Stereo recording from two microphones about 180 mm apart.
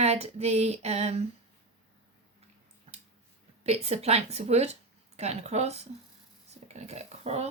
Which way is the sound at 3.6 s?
35° right (ahead or behind).